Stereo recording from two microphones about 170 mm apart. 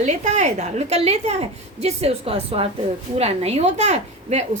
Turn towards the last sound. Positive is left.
turn(degrees=-40)  # may be behind; listen again after turning